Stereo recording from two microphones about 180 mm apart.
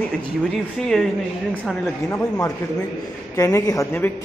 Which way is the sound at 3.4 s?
20° left (ahead or behind).